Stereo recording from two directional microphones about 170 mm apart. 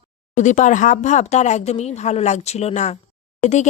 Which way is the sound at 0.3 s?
45° left (ahead or behind).